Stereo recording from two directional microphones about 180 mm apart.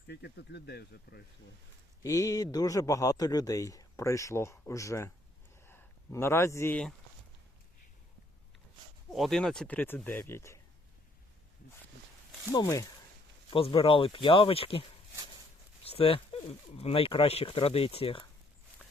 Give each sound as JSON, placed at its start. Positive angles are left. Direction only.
{"t": 0.1, "sound": "speech", "side_deg": 65}
{"t": 2.0, "sound": "a man's voice", "side_deg": 20}
{"t": 9.0, "sound": "a man's voice", "side_deg": 0}
{"t": 12.5, "sound": "a man's voice", "side_deg": 20}
{"t": 13.5, "sound": "speech", "side_deg": 30}